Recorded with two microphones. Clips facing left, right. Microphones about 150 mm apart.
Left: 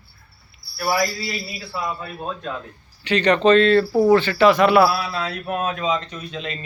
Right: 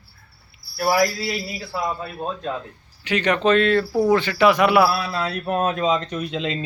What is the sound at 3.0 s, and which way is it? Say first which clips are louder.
Speech: left 3 dB; 10° right (ahead or behind).